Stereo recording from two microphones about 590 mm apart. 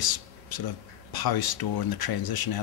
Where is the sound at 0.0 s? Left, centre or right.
Left.